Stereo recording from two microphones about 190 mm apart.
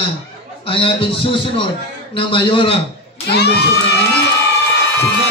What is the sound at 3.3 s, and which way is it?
Speech, 60° left (ahead or behind).